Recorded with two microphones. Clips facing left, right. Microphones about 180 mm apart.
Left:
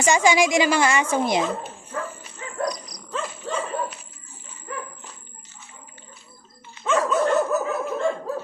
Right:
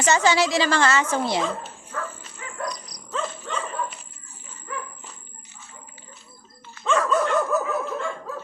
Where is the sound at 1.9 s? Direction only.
20° left (ahead or behind).